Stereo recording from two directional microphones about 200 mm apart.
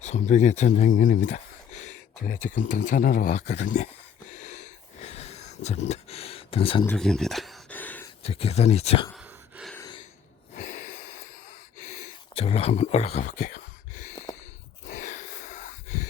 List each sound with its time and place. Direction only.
0.0 s speech: 35° left (ahead or behind)
4.4 s wheeze: 35° left (ahead or behind)
5.9 s speech: 30° left (ahead or behind)
6.8 s a sound: 5° left (ahead or behind)
8.2 s speech: 30° left (ahead or behind)
9.1 s gasp: 5° right (ahead or behind)
9.7 s gasp: 20° left (ahead or behind)
10.5 s snort: 40° left (ahead or behind)
11.8 s speech: 35° left (ahead or behind)
14.8 s a sound: 40° left (ahead or behind)